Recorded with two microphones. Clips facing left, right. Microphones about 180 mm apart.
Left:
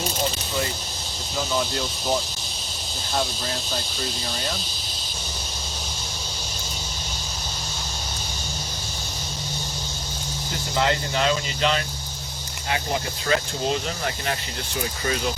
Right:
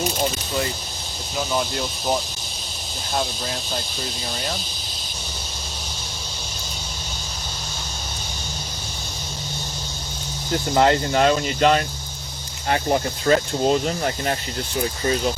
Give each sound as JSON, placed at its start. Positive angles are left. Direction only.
{"t": 10.8, "sound": "speech", "side_deg": -50}